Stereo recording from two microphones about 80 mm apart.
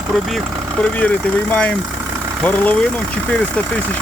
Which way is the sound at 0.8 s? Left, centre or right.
Centre.